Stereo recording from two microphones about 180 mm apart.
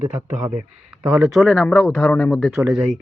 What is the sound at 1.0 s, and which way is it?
A man's voice, centre (ahead or behind).